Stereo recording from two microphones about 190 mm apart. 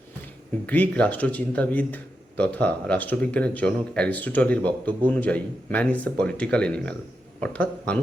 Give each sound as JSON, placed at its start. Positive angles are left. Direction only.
{"t": 0.7, "sound": "speech", "side_deg": 10}